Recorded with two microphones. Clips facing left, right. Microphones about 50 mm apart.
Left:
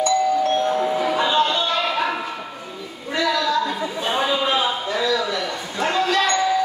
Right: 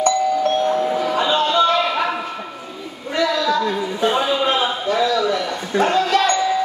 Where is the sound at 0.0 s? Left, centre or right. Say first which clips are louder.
Right 1 dB; right.